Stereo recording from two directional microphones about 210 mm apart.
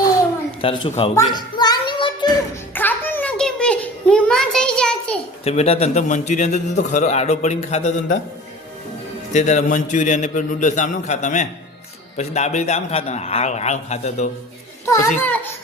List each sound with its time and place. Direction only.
0.6 s speech: 25° left (ahead or behind)
1.1 s a sound: 15° left (ahead or behind)
2.7 s a sound: 10° left (ahead or behind)
5.5 s a man's voice: 30° left (ahead or behind)
9.3 s a man's voice: 35° left (ahead or behind)
14.8 s a child's voice: 15° left (ahead or behind)